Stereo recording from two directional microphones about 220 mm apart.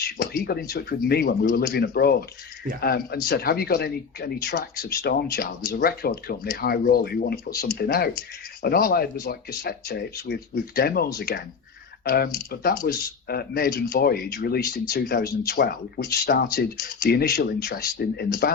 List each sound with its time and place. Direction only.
0.0 s speech: 45° left (ahead or behind)